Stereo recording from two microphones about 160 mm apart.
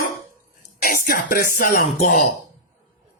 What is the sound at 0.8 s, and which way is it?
Speech, 60° left (ahead or behind).